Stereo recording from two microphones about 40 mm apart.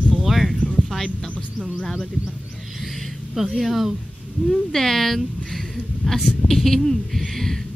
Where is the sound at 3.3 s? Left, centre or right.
Centre.